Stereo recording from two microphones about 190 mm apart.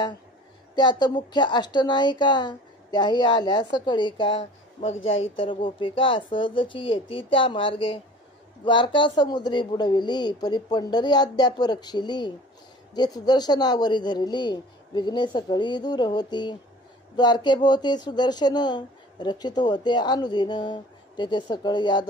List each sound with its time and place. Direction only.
0.7 s speech: 25° left (ahead or behind)
4.9 s speech: 90° left
5.3 s speech: 25° left (ahead or behind)